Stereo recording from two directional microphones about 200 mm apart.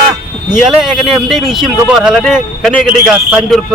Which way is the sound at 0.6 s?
Centre (ahead or behind).